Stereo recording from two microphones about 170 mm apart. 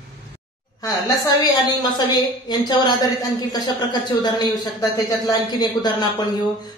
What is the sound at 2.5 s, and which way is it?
A man's voice, 25° left (ahead or behind).